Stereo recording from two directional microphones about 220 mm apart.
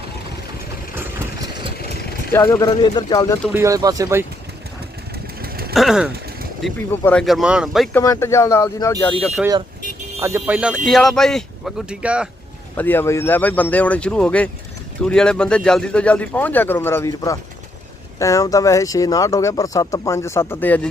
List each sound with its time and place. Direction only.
2.3 s speech: 15° left (ahead or behind)
3.5 s speech: 15° right (ahead or behind)
5.4 s vehicle: 45° right (ahead or behind)
5.7 s vehicle: centre (ahead or behind)
6.7 s speech: 10° left (ahead or behind)
8.0 s speech: 15° left (ahead or behind)
9.2 s speech: centre (ahead or behind)
10.2 s speech: 10° right (ahead or behind)
12.7 s speech: 10° left (ahead or behind)